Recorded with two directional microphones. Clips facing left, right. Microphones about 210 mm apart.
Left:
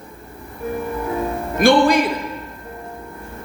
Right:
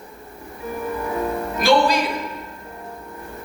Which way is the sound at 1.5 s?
55° left (ahead or behind).